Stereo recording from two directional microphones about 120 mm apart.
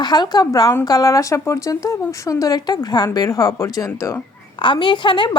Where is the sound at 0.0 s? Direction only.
35° left (ahead or behind).